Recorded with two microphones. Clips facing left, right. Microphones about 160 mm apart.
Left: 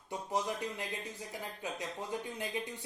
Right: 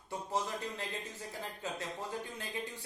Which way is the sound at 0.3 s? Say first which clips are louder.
Left 2 dB; 15° left (ahead or behind).